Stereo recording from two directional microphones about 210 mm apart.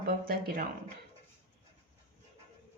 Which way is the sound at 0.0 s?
45° right (ahead or behind).